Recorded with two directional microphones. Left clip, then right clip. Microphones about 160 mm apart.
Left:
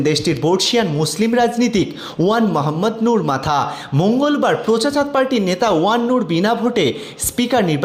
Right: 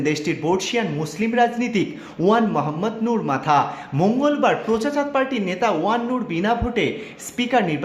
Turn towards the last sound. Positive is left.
turn(degrees=35)  # may be behind; listen again after turning